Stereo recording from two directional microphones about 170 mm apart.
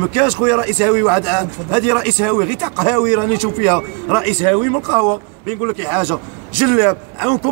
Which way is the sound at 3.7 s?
5° right (ahead or behind).